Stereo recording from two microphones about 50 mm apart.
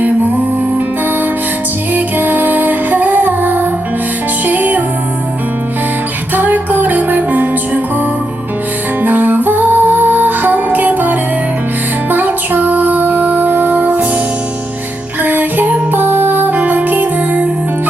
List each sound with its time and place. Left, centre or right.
1.9 s music: right
6.3 s music: right
9.0 s music: right
15.2 s music: right